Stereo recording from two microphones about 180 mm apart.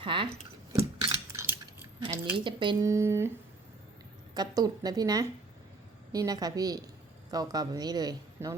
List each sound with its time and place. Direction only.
0.0 s a sound: 30° right (ahead or behind)
2.3 s a man's voice: 25° right (ahead or behind)
2.9 s speech: 15° right (ahead or behind)
4.4 s a man's voice: 20° right (ahead or behind)